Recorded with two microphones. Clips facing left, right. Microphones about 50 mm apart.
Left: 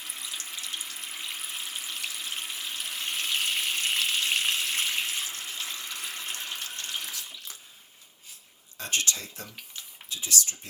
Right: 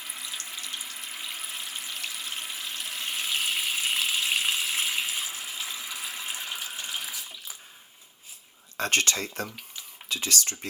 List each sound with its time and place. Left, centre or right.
0.0 s water: centre
8.8 s speech: right